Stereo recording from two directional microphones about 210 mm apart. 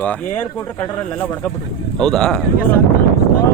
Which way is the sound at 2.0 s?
Centre (ahead or behind).